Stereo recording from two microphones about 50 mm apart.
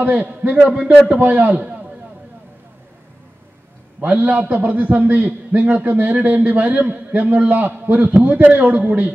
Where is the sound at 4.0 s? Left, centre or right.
Right.